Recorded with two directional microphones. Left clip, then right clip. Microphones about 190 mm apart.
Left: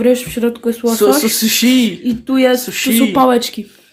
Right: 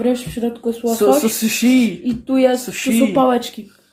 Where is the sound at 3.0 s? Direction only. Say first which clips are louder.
Left 3 dB; 40° left (ahead or behind).